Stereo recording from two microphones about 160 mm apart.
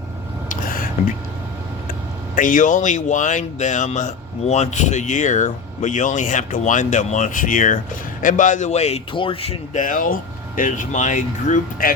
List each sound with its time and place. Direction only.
0.4 s a sound: 60° left (ahead or behind)
2.3 s speech: 55° left (ahead or behind); by 9.8 s 40° left (ahead or behind)
9.8 s speech: 55° left (ahead or behind)